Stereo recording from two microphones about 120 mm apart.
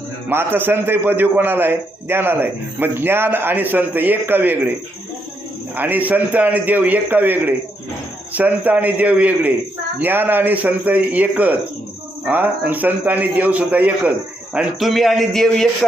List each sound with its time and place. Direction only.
0.3 s a man's voice: 15° right (ahead or behind)
5.7 s a man's voice: 15° right (ahead or behind); by 15.9 s 5° left (ahead or behind)